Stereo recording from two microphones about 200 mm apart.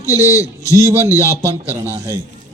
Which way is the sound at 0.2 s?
15° left (ahead or behind).